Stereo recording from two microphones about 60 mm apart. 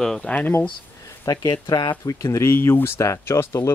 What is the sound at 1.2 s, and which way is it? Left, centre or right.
Speech, left.